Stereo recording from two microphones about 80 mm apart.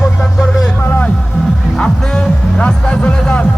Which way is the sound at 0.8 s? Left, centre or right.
Left.